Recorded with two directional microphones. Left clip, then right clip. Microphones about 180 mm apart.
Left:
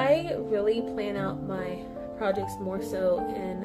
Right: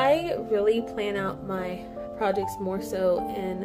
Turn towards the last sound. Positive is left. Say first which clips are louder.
# right 2 dB
turn(degrees=-35)  # may be behind; listen again after turning